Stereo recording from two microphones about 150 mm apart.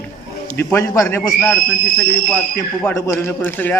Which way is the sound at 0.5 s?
15° left (ahead or behind).